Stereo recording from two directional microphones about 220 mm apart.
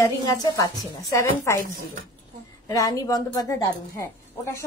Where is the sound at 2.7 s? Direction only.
15° left (ahead or behind).